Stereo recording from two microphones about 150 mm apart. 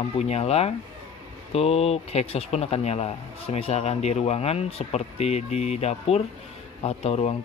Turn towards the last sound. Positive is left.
turn(degrees=45)  # may be behind; listen again after turning